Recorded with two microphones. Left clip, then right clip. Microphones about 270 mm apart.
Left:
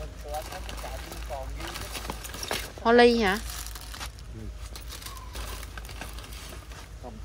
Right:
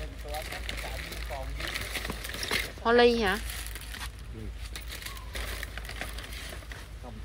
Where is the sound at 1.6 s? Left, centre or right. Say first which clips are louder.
Right 3 dB; centre.